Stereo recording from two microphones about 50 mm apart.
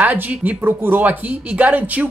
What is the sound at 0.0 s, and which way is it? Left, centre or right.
Speech, right.